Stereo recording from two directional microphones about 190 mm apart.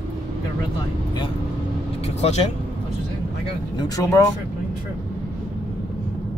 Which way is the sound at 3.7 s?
20° left (ahead or behind).